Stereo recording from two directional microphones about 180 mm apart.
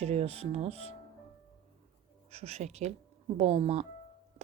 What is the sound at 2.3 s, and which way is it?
Speech, 35° right (ahead or behind).